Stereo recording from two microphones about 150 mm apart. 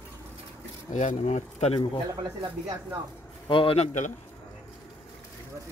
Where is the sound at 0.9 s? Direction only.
55° left (ahead or behind); by 2.0 s 40° left (ahead or behind).